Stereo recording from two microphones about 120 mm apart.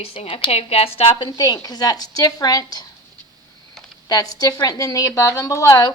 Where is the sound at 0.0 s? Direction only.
55° left (ahead or behind).